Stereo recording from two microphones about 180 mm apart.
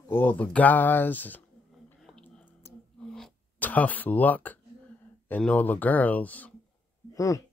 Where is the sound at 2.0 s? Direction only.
5° left (ahead or behind).